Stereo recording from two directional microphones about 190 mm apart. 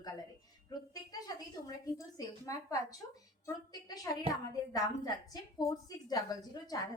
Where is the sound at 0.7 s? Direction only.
20° left (ahead or behind).